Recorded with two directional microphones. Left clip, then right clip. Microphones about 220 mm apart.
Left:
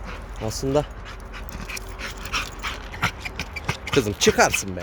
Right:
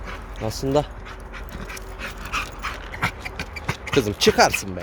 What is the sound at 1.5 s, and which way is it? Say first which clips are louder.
Dog: left 3 dB; 15° left (ahead or behind).